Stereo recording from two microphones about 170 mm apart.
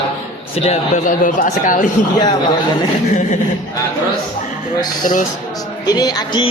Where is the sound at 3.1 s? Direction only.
45° left (ahead or behind).